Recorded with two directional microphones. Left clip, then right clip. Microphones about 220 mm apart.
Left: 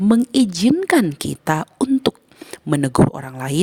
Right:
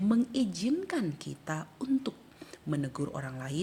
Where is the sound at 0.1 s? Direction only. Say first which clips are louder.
Left 14 dB; 50° left (ahead or behind).